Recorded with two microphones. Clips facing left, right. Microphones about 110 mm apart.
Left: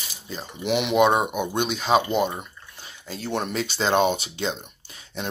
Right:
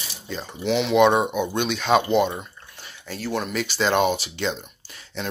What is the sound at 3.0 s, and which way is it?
Speech, 25° left (ahead or behind).